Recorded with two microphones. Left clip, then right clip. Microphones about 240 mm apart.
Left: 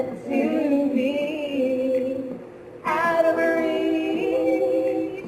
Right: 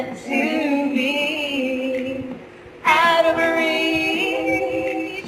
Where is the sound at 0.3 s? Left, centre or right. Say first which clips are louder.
Right 2 dB; centre.